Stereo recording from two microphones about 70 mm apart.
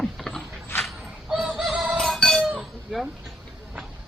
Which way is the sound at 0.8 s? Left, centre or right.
Centre.